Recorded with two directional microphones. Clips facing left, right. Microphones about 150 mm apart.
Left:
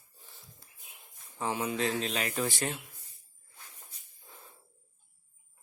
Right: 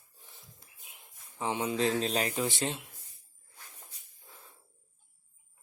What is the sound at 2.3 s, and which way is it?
Speech, 20° right (ahead or behind).